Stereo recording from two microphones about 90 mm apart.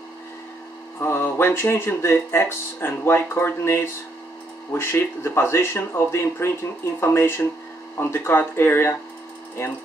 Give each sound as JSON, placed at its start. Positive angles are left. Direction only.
{"t": 0.9, "sound": "speech", "side_deg": 25}